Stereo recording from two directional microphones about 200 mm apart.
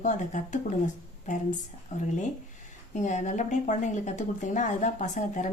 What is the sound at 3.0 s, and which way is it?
Speech, 35° left (ahead or behind).